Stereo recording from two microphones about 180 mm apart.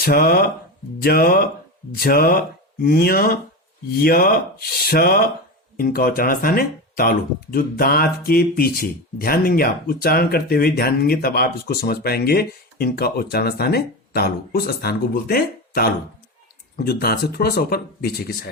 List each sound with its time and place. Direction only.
0.0 s speech: 55° left (ahead or behind)